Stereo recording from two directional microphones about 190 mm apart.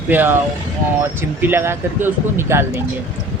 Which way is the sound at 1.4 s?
10° right (ahead or behind).